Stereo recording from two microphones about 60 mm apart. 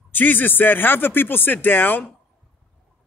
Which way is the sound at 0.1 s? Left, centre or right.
Left.